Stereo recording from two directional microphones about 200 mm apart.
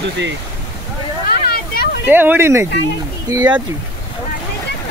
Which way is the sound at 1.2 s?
50° left (ahead or behind).